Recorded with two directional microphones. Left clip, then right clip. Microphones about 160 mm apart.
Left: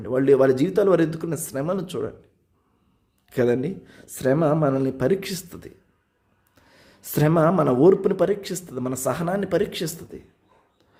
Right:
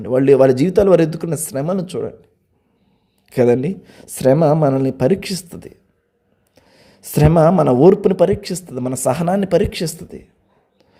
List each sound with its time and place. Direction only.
0.0 s speech: 35° right (ahead or behind)
3.2 s speech: 30° right (ahead or behind)